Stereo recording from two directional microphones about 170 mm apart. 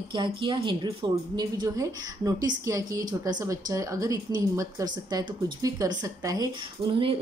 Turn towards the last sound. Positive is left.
turn(degrees=-30)  # may be behind; listen again after turning